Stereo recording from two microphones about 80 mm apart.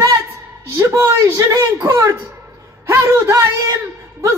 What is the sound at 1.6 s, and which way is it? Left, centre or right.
Speech, right.